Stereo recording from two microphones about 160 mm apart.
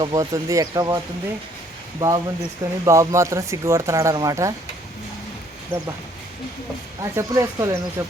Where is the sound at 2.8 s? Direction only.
20° right (ahead or behind).